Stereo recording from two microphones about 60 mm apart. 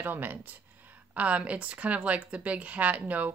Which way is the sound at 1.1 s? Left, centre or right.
Right.